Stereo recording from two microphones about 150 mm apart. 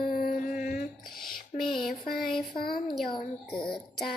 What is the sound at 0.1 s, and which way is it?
Mantra, 65° left (ahead or behind).